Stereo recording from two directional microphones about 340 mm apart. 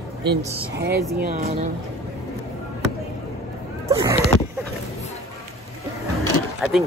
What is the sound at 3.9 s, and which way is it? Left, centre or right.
Speech, centre.